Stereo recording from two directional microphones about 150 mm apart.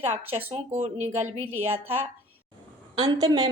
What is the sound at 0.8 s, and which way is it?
Speech, 45° right (ahead or behind).